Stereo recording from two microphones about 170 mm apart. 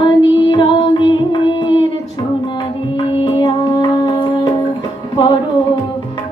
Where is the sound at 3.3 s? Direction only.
25° left (ahead or behind).